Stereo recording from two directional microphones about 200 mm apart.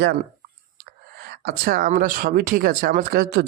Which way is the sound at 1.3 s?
50° right (ahead or behind).